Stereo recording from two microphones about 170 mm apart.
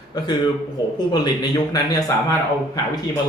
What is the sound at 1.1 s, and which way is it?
A man's voice, 25° left (ahead or behind).